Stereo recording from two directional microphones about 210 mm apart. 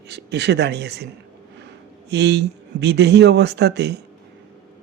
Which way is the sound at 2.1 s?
55° right (ahead or behind).